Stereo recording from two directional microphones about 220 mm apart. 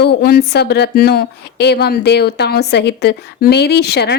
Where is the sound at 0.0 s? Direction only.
45° left (ahead or behind).